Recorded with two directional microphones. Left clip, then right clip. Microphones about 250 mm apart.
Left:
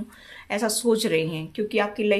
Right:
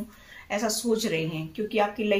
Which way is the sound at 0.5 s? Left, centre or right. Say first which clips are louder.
Left 4 dB; left.